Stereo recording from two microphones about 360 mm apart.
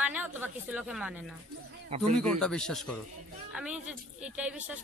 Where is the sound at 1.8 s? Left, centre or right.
Centre.